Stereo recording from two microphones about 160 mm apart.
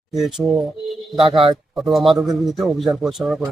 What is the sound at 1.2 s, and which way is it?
Speech, 35° right (ahead or behind).